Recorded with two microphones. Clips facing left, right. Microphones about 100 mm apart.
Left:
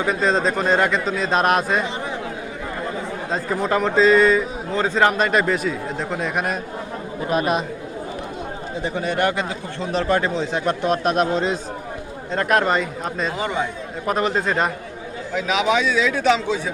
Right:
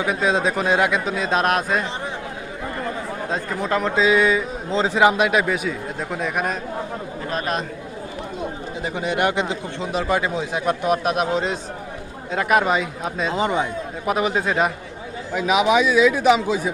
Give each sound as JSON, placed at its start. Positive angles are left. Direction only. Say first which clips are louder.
{"t": 0.0, "sound": "speech", "louder": "left 1 dB", "side_deg": -10}
{"t": 3.3, "sound": "a man's voice", "louder": "left 2 dB", "side_deg": 0}
{"t": 4.7, "sound": "a man's voice", "louder": "right 1 dB", "side_deg": -20}
{"t": 8.8, "sound": "a man's voice", "louder": "even", "side_deg": -15}
{"t": 13.3, "sound": "a man's voice", "louder": "right 6 dB", "side_deg": -20}
{"t": 14.0, "sound": "speech", "louder": "left 1 dB", "side_deg": -5}